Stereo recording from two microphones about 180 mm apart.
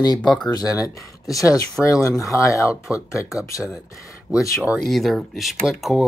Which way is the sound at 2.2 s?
15° left (ahead or behind).